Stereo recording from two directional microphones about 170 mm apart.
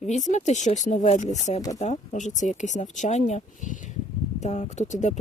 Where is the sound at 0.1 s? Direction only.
45° left (ahead or behind).